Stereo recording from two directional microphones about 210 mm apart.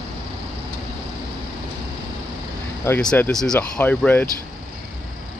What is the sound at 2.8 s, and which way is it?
Speech, 5° left (ahead or behind).